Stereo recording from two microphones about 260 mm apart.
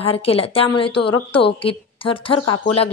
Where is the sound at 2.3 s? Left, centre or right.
Left.